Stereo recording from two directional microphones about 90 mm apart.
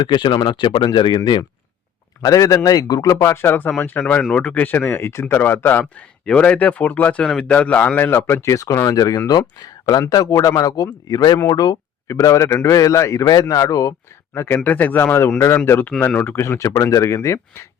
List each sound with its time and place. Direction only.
0.0 s speech: 55° left (ahead or behind)
2.2 s speech: 40° left (ahead or behind); by 4.5 s 10° left (ahead or behind)
4.5 s speech: 20° left (ahead or behind)
6.2 s speech: 10° left (ahead or behind); by 11.8 s 45° left (ahead or behind)
12.0 s speech: 35° left (ahead or behind)
14.3 s speech: 25° left (ahead or behind)